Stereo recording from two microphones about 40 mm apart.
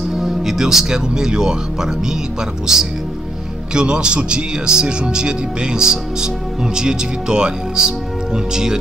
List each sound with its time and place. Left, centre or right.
0.1 s speech: centre